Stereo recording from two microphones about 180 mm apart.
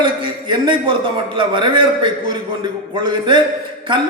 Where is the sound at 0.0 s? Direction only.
25° right (ahead or behind).